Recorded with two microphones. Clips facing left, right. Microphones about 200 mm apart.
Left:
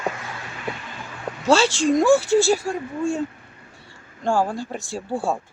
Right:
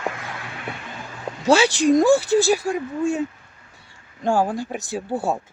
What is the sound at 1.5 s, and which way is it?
Speech, 15° right (ahead or behind).